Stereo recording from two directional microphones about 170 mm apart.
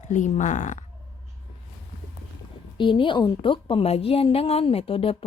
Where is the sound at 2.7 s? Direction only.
30° left (ahead or behind).